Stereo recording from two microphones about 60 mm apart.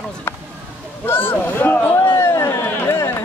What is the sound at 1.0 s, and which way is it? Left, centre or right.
Speech, left.